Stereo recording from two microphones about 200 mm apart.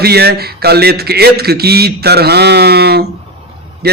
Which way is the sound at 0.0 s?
55° right (ahead or behind).